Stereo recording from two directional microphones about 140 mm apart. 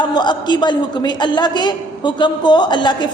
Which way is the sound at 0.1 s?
30° left (ahead or behind).